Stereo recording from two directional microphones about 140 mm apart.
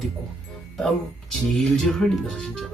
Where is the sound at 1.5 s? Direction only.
Centre (ahead or behind).